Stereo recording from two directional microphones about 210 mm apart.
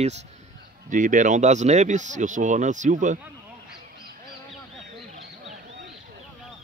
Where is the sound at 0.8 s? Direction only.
35° right (ahead or behind).